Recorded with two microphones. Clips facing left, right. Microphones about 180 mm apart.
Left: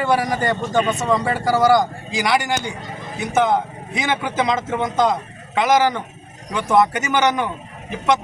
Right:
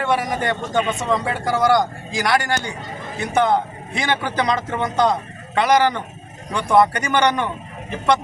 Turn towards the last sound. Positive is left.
turn(degrees=10)  # may be behind; listen again after turning